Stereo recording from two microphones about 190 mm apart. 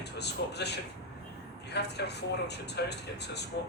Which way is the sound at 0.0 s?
60° left (ahead or behind).